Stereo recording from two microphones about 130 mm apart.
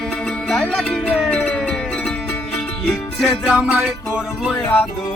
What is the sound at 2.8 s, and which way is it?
Music, centre (ahead or behind).